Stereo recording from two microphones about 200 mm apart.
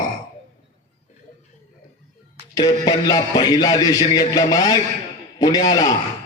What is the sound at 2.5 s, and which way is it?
Speech, 20° left (ahead or behind).